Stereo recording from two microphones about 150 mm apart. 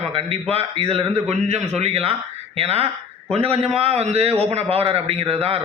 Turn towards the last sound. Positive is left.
turn(degrees=-40)  # may be behind; listen again after turning